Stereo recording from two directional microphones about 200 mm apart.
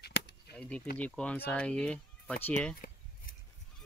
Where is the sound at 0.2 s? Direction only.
60° left (ahead or behind).